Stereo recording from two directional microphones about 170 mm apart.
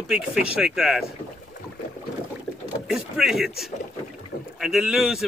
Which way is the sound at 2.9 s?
5° right (ahead or behind).